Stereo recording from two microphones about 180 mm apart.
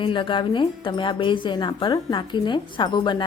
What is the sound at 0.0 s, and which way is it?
Speech, 25° left (ahead or behind).